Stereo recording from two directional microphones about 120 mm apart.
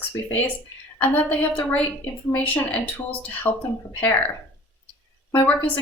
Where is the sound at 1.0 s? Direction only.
15° left (ahead or behind).